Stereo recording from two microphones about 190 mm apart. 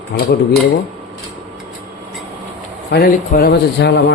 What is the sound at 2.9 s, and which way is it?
Speech, 50° left (ahead or behind).